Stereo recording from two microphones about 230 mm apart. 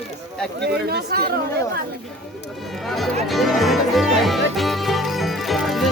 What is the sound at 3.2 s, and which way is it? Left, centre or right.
Music, centre.